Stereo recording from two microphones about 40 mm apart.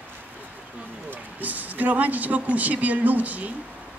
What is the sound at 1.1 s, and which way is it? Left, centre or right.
Speech, right.